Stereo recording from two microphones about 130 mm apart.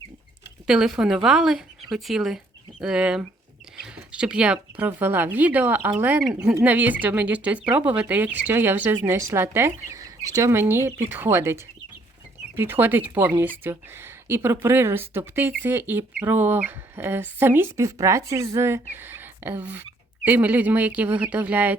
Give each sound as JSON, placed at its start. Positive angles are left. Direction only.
{"t": 0.7, "sound": "speech", "side_deg": -5}